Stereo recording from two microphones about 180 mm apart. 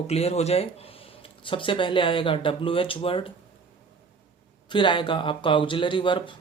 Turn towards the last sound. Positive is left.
turn(degrees=25)  # may be behind; listen again after turning